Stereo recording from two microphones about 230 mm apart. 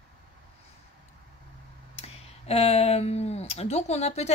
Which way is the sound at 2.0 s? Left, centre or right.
Left.